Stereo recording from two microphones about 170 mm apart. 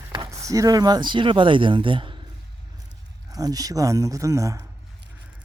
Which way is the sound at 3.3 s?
20° right (ahead or behind).